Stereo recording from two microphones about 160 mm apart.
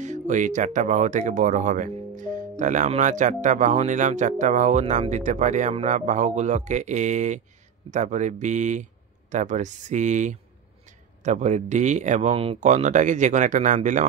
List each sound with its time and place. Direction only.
0.0 s speech: 50° right (ahead or behind)